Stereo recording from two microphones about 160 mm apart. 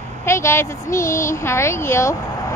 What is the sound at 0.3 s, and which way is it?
A woman's voice, 15° left (ahead or behind).